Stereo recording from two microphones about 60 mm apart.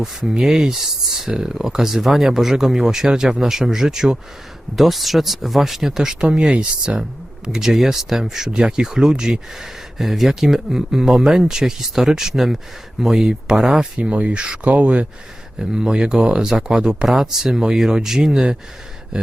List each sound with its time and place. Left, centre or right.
0.0 s speech: centre; by 15.0 s right
15.5 s speech: centre